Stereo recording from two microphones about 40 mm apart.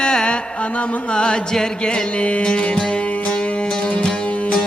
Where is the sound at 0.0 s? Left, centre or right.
Left.